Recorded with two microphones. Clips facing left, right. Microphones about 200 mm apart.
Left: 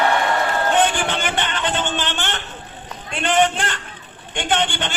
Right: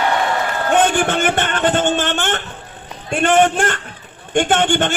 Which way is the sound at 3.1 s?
50° right (ahead or behind).